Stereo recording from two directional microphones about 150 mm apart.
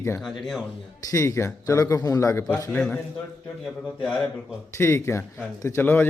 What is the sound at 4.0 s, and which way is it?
Speech, 5° left (ahead or behind).